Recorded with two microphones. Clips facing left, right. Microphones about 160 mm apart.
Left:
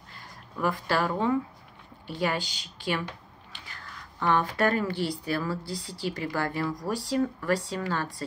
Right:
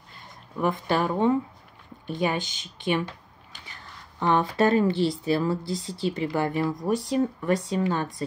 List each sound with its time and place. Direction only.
0.6 s speech: 20° right (ahead or behind)
4.2 s speech: 20° right (ahead or behind)